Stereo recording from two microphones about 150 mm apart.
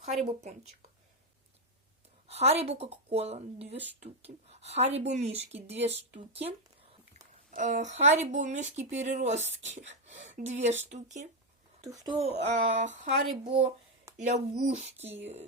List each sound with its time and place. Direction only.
0.0 s speech: 45° right (ahead or behind)
2.2 s speech: 45° right (ahead or behind)
7.5 s speech: 55° right (ahead or behind)
11.8 s speech: 25° right (ahead or behind)
12.1 s speech: 45° right (ahead or behind)
13.4 s speech: 40° right (ahead or behind)
14.2 s speech: 55° right (ahead or behind)